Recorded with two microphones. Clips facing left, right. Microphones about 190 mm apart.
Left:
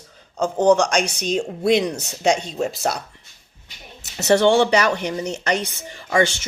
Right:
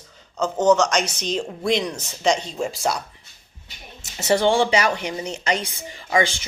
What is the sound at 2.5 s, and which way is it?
Speech, 40° left (ahead or behind).